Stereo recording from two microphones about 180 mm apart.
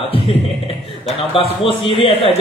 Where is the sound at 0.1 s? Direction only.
30° left (ahead or behind).